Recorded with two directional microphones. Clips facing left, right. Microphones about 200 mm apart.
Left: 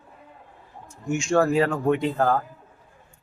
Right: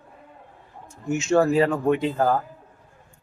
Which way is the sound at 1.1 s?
5° right (ahead or behind).